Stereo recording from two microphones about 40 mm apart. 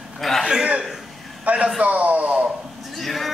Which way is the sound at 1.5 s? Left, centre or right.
Right.